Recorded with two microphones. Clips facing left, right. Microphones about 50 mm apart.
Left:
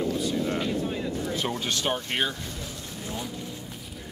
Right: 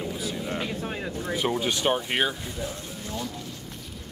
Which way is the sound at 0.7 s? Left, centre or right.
Right.